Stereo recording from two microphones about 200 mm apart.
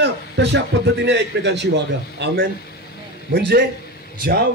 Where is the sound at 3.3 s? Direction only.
65° right (ahead or behind).